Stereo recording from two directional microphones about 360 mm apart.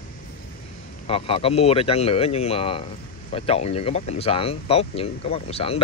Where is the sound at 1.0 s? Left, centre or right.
Centre.